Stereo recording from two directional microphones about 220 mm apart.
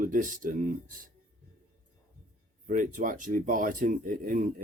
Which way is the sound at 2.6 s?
35° right (ahead or behind).